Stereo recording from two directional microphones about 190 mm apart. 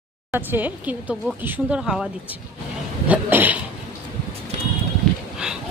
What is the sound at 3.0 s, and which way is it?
Cough, 10° right (ahead or behind).